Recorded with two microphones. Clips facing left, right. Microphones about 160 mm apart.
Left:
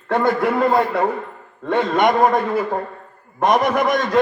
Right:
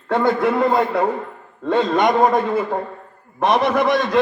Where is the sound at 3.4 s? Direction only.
15° left (ahead or behind).